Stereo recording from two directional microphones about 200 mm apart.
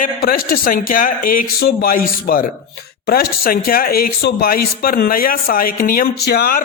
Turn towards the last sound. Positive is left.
turn(degrees=50)  # may be behind; listen again after turning